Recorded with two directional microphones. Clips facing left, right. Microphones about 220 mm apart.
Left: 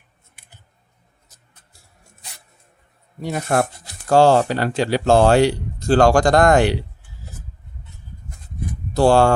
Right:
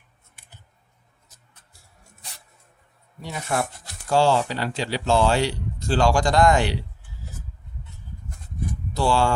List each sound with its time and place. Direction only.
3.2 s speech: 45° left (ahead or behind)
8.9 s speech: 50° left (ahead or behind)